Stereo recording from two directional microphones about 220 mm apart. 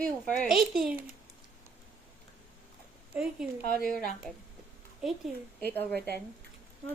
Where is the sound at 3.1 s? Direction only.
5° right (ahead or behind).